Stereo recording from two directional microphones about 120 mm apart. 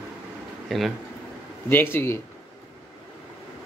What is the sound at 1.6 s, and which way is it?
Speech, 15° left (ahead or behind).